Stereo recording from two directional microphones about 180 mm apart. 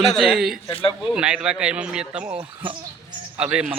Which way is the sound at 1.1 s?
5° right (ahead or behind).